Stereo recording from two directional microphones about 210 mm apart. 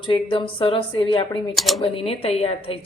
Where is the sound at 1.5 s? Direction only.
Centre (ahead or behind).